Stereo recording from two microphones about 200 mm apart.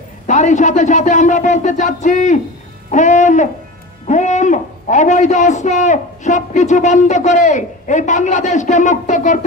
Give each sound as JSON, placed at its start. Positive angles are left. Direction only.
{"t": 0.3, "sound": "a man's voice", "side_deg": 40}